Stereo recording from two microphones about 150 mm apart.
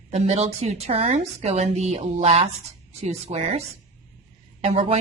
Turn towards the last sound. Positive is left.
turn(degrees=-40)  # may be behind; listen again after turning